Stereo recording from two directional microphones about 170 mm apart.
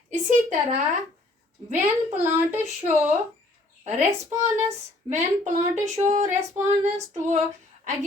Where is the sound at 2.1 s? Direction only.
10° right (ahead or behind).